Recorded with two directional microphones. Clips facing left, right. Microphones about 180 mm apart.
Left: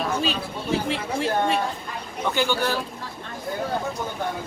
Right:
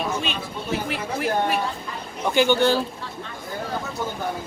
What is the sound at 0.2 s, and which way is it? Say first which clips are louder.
Speech: left 2 dB; 30° left (ahead or behind).